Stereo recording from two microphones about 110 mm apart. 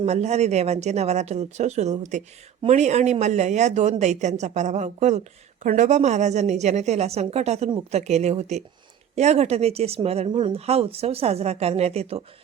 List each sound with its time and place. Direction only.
0.0 s speech: 90° right; by 10.2 s 65° right (ahead or behind)
10.2 s speech: 50° right (ahead or behind); by 12.2 s 70° right (ahead or behind)